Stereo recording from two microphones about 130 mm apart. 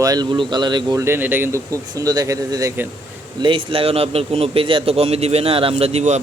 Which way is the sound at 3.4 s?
40° right (ahead or behind).